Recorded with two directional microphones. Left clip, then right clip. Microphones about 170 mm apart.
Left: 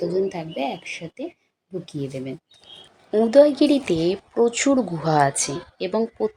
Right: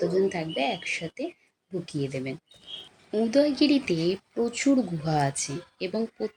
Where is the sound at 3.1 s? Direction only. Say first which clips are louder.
Left 9 dB; 25° left (ahead or behind).